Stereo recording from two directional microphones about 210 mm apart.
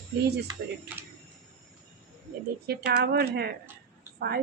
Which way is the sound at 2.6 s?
55° right (ahead or behind).